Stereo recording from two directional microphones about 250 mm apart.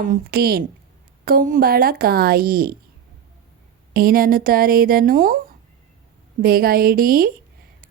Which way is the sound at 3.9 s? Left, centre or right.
Right.